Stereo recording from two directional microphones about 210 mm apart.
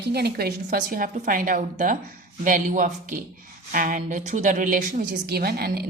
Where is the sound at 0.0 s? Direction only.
50° right (ahead or behind).